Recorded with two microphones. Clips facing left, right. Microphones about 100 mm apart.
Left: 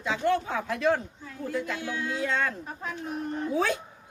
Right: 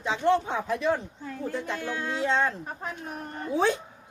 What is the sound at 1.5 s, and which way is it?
Speech, 35° right (ahead or behind).